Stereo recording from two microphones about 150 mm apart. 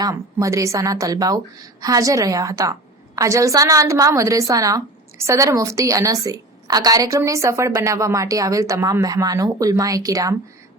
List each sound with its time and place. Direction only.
0.0 s a woman's voice: 20° right (ahead or behind)